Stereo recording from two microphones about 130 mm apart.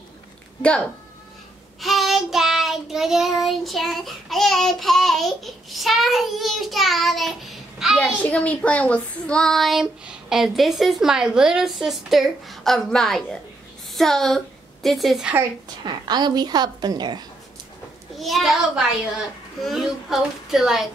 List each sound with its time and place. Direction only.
0.6 s speech: 10° left (ahead or behind)
1.8 s child singing: centre (ahead or behind)
8.0 s child singing: 10° left (ahead or behind)
13.9 s a woman's voice: 5° left (ahead or behind)
15.8 s a woman's voice: 35° right (ahead or behind)
18.1 s child singing: centre (ahead or behind)